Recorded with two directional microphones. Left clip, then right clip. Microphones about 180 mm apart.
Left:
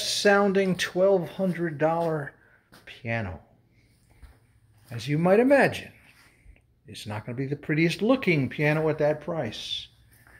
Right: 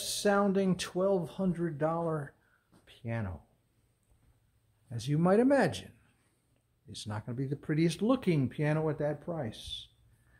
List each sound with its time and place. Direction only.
0.2 s speech: 10° right (ahead or behind)
2.8 s a sound: 15° right (ahead or behind)
4.8 s speech: 20° right (ahead or behind)
7.0 s speech: 15° right (ahead or behind)